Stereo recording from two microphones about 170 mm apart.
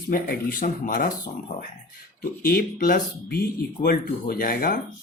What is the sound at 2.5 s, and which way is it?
Speech, 60° left (ahead or behind).